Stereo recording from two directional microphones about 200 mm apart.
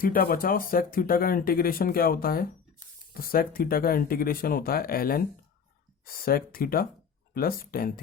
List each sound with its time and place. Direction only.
0.0 s speech: 45° left (ahead or behind)